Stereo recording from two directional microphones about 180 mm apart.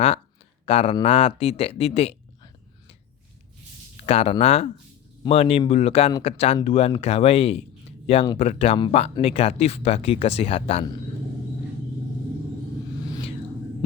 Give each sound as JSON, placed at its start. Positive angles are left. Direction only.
{"t": 0.6, "sound": "speech", "side_deg": 35}
{"t": 4.0, "sound": "speech", "side_deg": 35}